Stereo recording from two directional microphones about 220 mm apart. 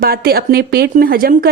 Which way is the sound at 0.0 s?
45° right (ahead or behind).